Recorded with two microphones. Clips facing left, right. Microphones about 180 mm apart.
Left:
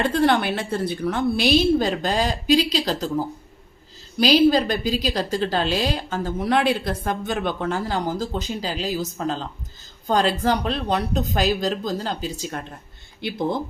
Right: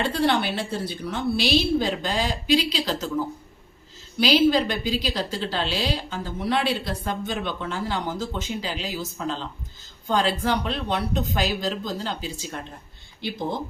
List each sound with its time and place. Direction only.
0.0 s a woman's voice: 50° left (ahead or behind)